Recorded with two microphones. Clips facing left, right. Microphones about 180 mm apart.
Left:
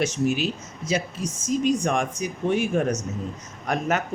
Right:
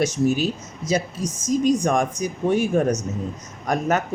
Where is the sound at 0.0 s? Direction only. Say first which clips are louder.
Right 3 dB; 40° right (ahead or behind).